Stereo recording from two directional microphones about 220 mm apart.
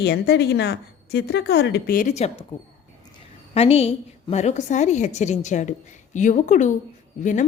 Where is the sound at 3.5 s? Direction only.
25° left (ahead or behind).